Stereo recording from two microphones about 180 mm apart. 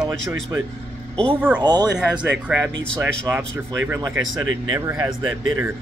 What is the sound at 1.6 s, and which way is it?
Speech, 25° right (ahead or behind).